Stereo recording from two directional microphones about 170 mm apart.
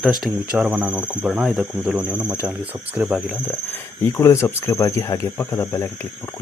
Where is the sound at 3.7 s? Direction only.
15° left (ahead or behind).